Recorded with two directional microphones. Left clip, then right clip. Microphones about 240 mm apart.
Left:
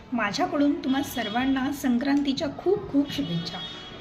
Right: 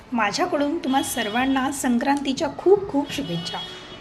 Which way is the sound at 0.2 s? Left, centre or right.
Centre.